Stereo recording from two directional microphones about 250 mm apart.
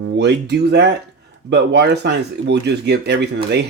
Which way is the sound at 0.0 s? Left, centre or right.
Right.